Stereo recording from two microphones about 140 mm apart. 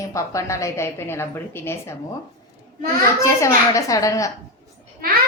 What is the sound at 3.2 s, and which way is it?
A woman's voice, 20° left (ahead or behind).